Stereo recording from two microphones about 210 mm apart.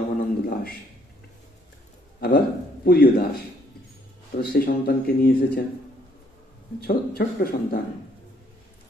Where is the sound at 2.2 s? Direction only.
45° left (ahead or behind).